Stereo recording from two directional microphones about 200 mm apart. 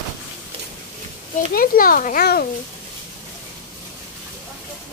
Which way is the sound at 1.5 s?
45° left (ahead or behind).